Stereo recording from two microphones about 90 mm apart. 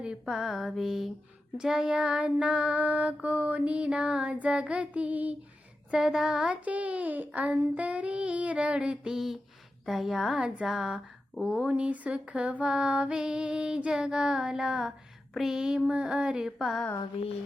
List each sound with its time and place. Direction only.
0.0 s speech: 10° right (ahead or behind)
11.6 s speech: 15° right (ahead or behind)
17.0 s a sound: 90° left